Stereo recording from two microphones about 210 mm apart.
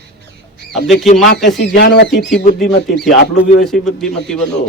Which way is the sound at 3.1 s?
40° left (ahead or behind).